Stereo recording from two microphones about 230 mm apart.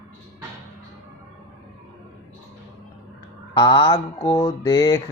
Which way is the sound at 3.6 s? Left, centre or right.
Centre.